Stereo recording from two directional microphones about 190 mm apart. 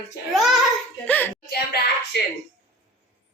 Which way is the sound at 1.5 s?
55° left (ahead or behind).